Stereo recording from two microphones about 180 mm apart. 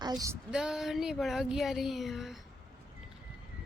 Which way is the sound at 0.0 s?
20° right (ahead or behind).